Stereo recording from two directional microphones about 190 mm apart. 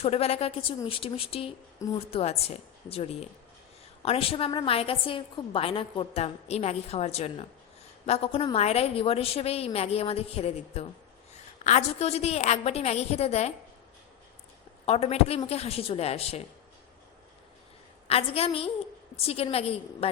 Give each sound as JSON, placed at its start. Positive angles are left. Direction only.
{"t": 0.0, "sound": "a woman's voice", "side_deg": 30}
{"t": 14.8, "sound": "a woman's voice", "side_deg": 35}
{"t": 18.1, "sound": "a woman's voice", "side_deg": 30}